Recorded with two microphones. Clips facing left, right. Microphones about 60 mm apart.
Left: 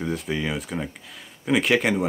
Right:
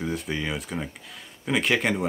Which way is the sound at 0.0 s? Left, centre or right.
Centre.